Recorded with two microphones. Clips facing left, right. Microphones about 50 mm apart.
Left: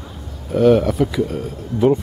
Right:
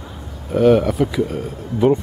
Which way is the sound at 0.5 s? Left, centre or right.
Centre.